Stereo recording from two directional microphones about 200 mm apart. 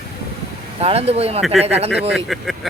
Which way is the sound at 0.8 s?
30° right (ahead or behind).